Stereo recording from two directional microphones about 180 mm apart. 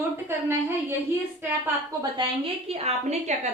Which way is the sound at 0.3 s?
15° right (ahead or behind).